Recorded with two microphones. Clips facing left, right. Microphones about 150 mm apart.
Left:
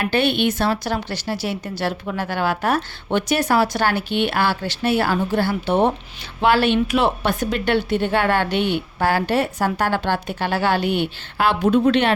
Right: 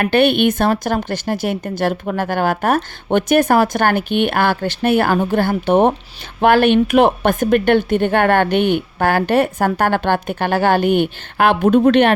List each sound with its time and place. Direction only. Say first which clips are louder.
0.0 s a woman's voice: right 5 dB; 55° right (ahead or behind)